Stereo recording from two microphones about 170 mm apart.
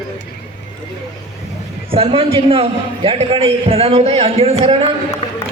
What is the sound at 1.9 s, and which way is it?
A man's voice, 35° right (ahead or behind).